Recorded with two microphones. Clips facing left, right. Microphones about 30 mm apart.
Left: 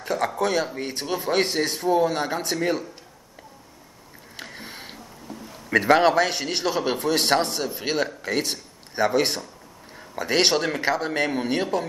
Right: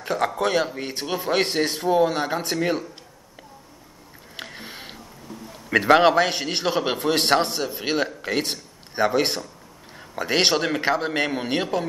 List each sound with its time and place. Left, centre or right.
0.0 s speech: centre
4.4 s a sound: centre
5.8 s speech: centre